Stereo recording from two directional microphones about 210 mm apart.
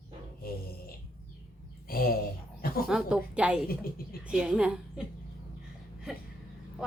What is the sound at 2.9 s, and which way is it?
Speech, 5° right (ahead or behind).